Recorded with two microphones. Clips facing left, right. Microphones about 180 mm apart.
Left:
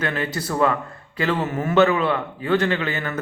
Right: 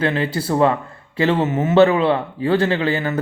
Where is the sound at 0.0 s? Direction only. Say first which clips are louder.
Right 5 dB; 30° right (ahead or behind).